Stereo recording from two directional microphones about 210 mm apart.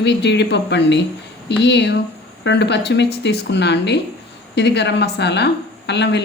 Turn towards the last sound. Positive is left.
turn(degrees=55)  # may be behind; listen again after turning